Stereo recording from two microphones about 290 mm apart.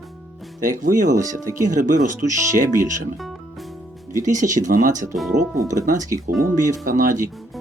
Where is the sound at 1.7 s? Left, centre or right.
Right.